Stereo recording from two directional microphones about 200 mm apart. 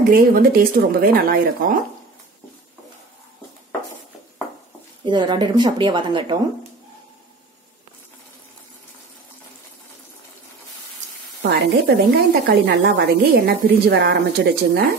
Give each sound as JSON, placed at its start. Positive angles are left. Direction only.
{"t": 0.1, "sound": "a woman's voice", "side_deg": -45}
{"t": 5.0, "sound": "speech", "side_deg": -20}
{"t": 11.4, "sound": "a woman's voice", "side_deg": -55}